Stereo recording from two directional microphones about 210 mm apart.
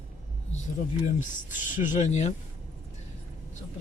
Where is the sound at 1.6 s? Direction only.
35° left (ahead or behind).